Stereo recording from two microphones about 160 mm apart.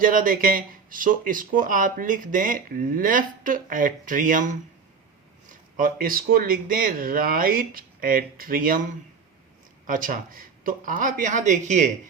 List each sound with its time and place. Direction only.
0.0 s speech: 60° right (ahead or behind)
5.5 s speech: 60° right (ahead or behind)
9.8 s speech: 60° right (ahead or behind)